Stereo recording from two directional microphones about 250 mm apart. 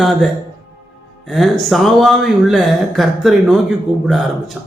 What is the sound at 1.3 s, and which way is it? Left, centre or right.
Speech, centre.